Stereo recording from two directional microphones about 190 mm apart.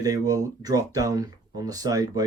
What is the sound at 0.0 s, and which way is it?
Speech, 20° right (ahead or behind).